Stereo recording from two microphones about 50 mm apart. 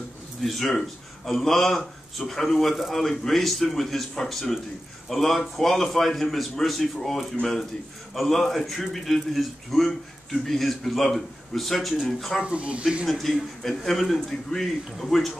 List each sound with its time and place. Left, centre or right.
0.4 s a man's voice: centre
12.4 s speech: right
13.0 s a man's voice: centre